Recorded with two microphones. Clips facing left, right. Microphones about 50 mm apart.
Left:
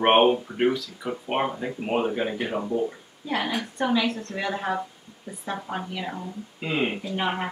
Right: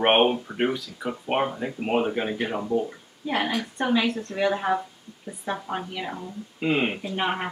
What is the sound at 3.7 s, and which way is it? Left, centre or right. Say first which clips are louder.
Speech: even; centre.